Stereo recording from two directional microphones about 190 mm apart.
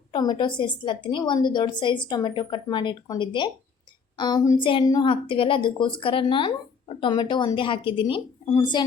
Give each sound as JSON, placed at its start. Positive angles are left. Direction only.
{"t": 0.1, "sound": "a woman's voice", "side_deg": 25}